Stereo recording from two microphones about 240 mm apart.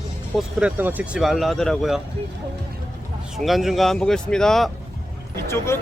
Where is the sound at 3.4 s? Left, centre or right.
Centre.